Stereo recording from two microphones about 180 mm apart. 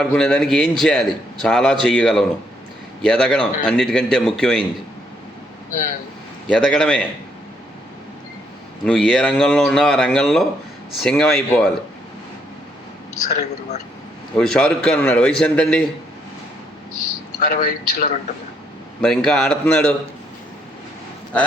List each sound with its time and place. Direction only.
0.0 s a man's voice: 5° left (ahead or behind)
6.5 s a man's voice: 5° left (ahead or behind)
8.8 s a man's voice: 5° left (ahead or behind)
13.2 s a woman's voice: 40° left (ahead or behind)
14.3 s a man's voice: 5° left (ahead or behind)
17.4 s a man's voice: 55° left (ahead or behind)
19.0 s a man's voice: 5° left (ahead or behind)